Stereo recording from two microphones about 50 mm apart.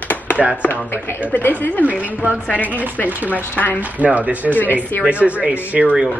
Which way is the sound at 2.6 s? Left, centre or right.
Right.